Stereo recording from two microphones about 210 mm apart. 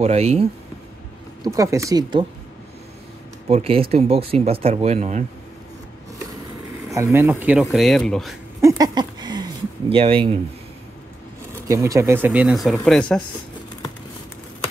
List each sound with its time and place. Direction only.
0.0 s speech: 30° right (ahead or behind)
1.4 s speech: 15° right (ahead or behind)
3.4 s speech: 30° right (ahead or behind)
6.9 s speech: 15° right (ahead or behind); by 8.4 s centre (ahead or behind)
8.5 s a sound: 15° right (ahead or behind)
11.6 s speech: 15° right (ahead or behind); by 13.2 s centre (ahead or behind)